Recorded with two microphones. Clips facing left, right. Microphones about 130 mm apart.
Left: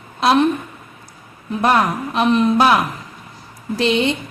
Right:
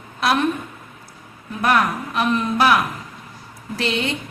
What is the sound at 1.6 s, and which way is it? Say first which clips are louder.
Speech: left 2 dB; 25° left (ahead or behind).